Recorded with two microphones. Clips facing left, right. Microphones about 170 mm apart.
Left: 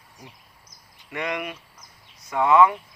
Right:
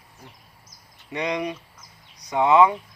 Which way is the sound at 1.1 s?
20° right (ahead or behind).